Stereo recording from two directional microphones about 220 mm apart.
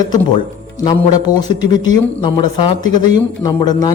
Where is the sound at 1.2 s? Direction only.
20° left (ahead or behind).